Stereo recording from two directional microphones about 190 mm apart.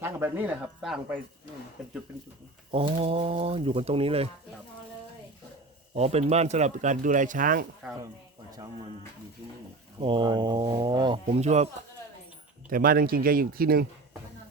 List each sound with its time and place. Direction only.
0.0 s speech: 10° right (ahead or behind)
2.7 s speech: 30° right (ahead or behind)
5.9 s speech: 35° right (ahead or behind)
8.5 s speech: 20° right (ahead or behind)
10.0 s speech: 25° right (ahead or behind)
12.7 s speech: 50° right (ahead or behind)